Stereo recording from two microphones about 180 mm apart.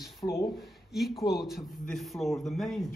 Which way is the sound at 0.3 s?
15° left (ahead or behind).